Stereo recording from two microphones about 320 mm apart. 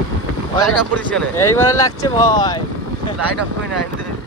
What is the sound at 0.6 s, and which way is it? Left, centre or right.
Speech, centre.